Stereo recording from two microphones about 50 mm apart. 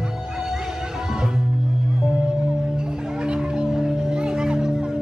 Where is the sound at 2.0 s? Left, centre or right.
Centre.